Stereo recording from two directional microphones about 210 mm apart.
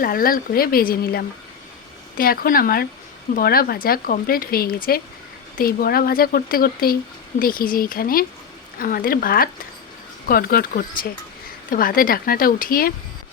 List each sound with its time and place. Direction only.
0.0 s speech: 45° left (ahead or behind)